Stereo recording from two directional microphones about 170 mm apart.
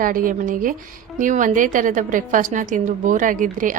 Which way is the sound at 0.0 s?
55° right (ahead or behind).